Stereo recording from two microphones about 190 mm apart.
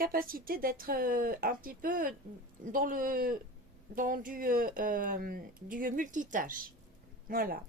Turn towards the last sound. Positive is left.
turn(degrees=-50)  # may be behind; listen again after turning